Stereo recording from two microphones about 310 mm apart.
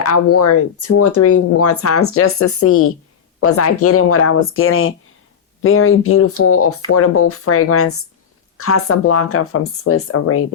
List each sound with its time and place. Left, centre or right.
0.0 s speech: left